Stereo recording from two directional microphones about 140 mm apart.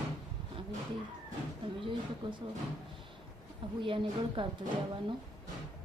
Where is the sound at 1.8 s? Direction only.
35° right (ahead or behind).